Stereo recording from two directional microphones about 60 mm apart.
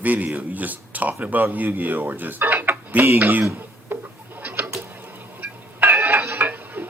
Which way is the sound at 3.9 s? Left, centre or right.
Right.